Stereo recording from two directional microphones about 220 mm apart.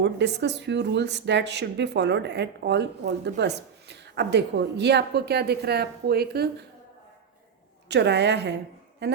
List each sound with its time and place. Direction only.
0.0 s a woman's voice: 50° right (ahead or behind)
7.9 s a woman's voice: 50° right (ahead or behind)